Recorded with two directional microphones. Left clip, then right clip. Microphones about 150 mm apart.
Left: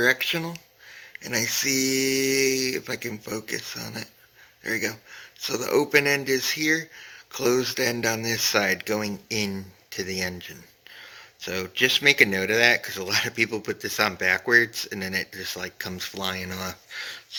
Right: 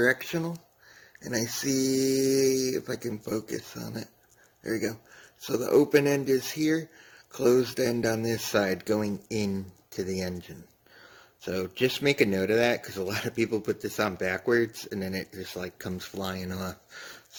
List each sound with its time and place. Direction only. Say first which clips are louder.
0.1 s speech: left 5 dB; 25° right (ahead or behind)